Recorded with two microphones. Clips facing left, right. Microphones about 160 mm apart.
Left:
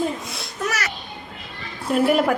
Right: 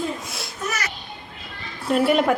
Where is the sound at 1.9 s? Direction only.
Centre (ahead or behind).